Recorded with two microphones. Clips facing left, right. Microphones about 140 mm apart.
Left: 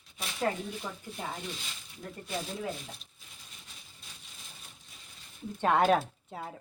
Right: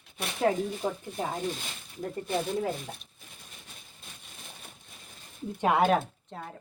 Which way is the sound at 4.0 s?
55° right (ahead or behind).